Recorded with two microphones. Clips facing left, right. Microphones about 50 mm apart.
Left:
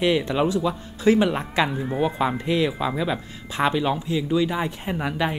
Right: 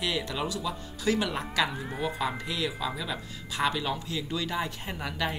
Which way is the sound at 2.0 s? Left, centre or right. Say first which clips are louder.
Left 7 dB; left.